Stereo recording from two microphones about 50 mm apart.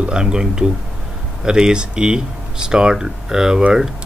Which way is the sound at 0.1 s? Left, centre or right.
Centre.